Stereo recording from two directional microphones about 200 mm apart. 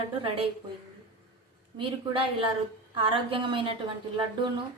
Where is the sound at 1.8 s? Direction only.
25° right (ahead or behind).